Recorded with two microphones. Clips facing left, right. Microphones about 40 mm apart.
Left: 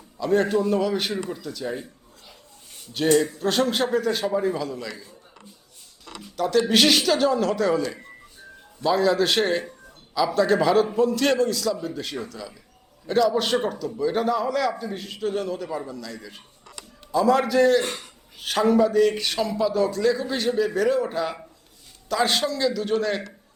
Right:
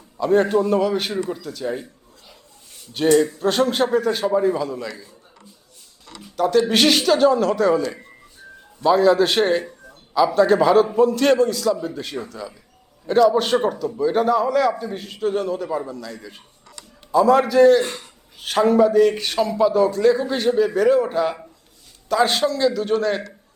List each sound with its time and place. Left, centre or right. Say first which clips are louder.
0.2 s a man's voice: right 4 dB; centre
2.9 s a man's voice: right 4 dB; centre
6.2 s a man's voice: right 4 dB; centre